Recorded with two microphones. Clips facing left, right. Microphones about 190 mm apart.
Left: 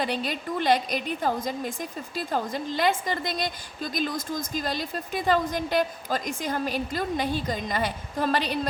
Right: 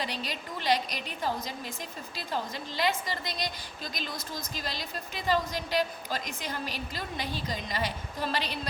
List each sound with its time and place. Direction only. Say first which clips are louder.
0.0 s a woman's voice: left 7 dB; 50° left (ahead or behind)